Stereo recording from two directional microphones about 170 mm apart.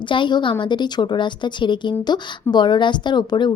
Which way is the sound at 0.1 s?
25° left (ahead or behind).